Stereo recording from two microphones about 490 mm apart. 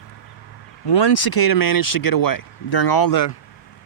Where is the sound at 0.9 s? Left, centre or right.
Left.